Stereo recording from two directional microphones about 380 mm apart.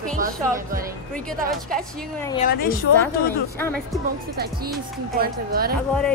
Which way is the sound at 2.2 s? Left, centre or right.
Centre.